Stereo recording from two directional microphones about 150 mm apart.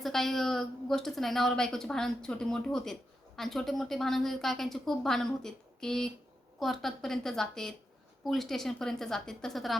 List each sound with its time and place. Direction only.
0.0 s a woman's voice: centre (ahead or behind)